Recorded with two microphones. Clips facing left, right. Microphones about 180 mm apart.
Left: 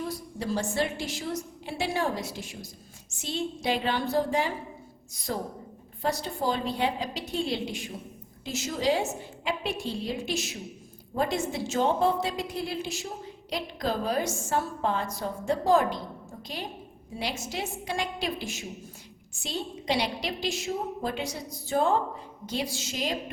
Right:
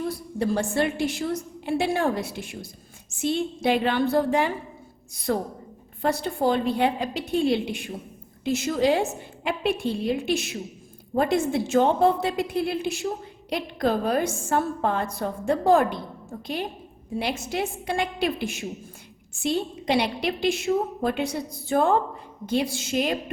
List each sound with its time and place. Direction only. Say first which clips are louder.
0.1 s a woman's voice: right 5 dB; 55° right (ahead or behind)
17.2 s a woman's voice: right 6 dB; 55° right (ahead or behind)